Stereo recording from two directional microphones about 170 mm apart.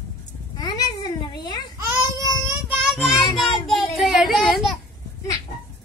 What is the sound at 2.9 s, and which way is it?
Child singing, 5° right (ahead or behind).